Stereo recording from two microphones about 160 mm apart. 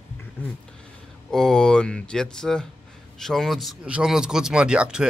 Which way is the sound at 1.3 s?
5° left (ahead or behind).